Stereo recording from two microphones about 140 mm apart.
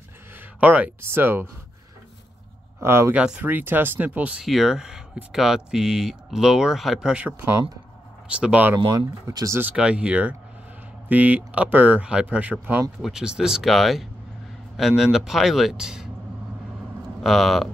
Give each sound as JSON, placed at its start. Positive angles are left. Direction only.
{"t": 0.6, "sound": "speech", "side_deg": -10}
{"t": 2.8, "sound": "speech", "side_deg": -20}
{"t": 8.7, "sound": "speech", "side_deg": -30}
{"t": 9.6, "sound": "speech", "side_deg": -10}
{"t": 17.2, "sound": "speech", "side_deg": 0}